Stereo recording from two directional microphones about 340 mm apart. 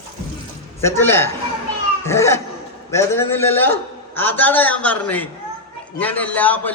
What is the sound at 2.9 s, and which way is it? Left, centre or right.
A man's voice, centre.